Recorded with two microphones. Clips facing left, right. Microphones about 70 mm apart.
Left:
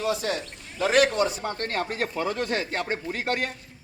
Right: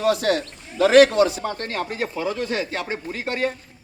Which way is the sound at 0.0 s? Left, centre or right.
Right.